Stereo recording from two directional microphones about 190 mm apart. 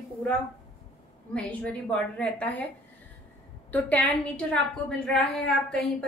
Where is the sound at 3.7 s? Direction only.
10° left (ahead or behind).